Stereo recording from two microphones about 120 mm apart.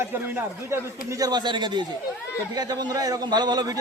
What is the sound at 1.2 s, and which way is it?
A man's voice, 35° right (ahead or behind).